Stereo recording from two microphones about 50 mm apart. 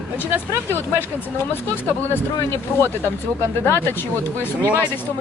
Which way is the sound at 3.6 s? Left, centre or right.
Left.